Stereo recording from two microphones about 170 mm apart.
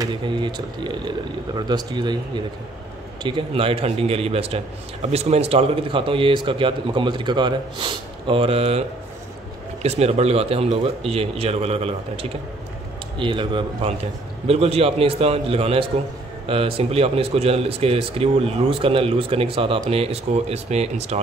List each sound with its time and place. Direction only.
0.0 s speech: 25° right (ahead or behind)
9.8 s speech: 40° right (ahead or behind)